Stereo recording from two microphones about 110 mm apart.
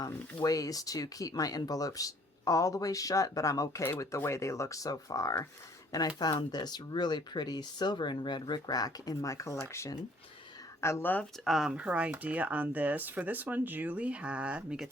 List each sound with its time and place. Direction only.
0.0 s speech: 35° left (ahead or behind); by 11.3 s 15° left (ahead or behind)
11.4 s speech: 5° right (ahead or behind)